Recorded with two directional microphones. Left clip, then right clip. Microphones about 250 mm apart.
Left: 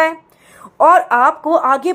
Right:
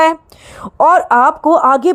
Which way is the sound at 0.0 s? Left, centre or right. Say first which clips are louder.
Right 4 dB; right.